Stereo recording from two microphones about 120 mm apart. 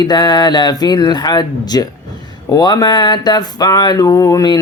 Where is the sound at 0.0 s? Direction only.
35° left (ahead or behind).